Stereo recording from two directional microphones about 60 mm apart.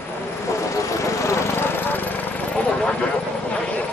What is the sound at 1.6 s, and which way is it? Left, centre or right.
Vehicle, left.